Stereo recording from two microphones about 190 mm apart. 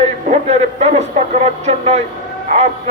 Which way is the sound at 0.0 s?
35° right (ahead or behind).